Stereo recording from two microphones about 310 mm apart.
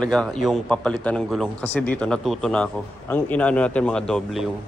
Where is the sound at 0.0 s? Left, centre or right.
Centre.